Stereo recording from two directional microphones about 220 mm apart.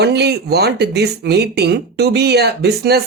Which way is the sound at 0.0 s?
50° right (ahead or behind).